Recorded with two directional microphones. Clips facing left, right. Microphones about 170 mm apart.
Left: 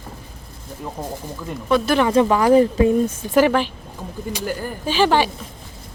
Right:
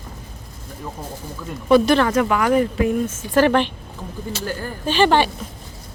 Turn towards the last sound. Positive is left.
turn(degrees=5)  # may be behind; listen again after turning